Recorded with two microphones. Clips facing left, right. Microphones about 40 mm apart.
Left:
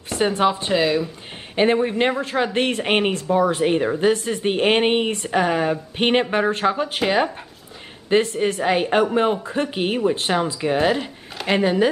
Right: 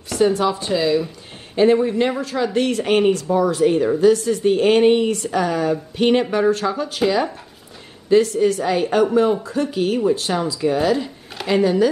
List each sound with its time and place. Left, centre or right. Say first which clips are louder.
0.1 s speech: right 2 dB; left
0.7 s speech: right 3 dB; centre
1.5 s speech: right 3 dB; left